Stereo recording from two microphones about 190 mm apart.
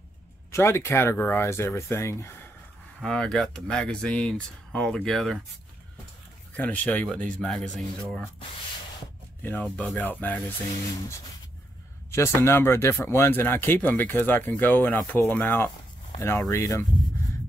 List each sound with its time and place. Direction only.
0.5 s speech: 15° left (ahead or behind)
3.0 s speech: 5° left (ahead or behind)
6.5 s speech: 10° left (ahead or behind)
9.4 s speech: 10° left (ahead or behind)
12.1 s speech: 15° left (ahead or behind)